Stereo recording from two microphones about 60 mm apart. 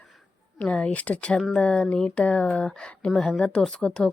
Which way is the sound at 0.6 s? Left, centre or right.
Left.